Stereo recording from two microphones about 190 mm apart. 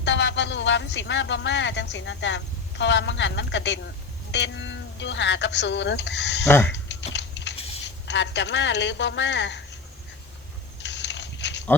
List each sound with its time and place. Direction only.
0.0 s speech: 70° left (ahead or behind)
6.4 s speech: 10° left (ahead or behind)
6.8 s typing: 70° left (ahead or behind)
8.0 s speech: 70° left (ahead or behind)
10.8 s a sound: 70° left (ahead or behind)